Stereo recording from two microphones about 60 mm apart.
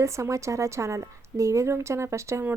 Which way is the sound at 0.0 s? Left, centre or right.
Right.